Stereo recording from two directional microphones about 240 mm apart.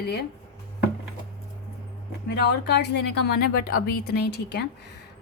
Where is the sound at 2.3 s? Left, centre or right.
Left.